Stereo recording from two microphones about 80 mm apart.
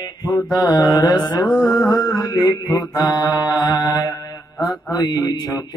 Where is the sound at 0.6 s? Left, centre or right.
Left.